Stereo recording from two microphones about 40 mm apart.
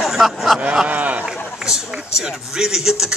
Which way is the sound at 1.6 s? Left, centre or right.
Centre.